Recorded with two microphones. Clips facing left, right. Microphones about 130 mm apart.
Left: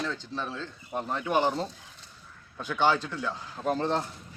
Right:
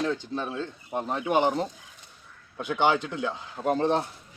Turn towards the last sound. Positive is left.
turn(degrees=-15)  # may be behind; listen again after turning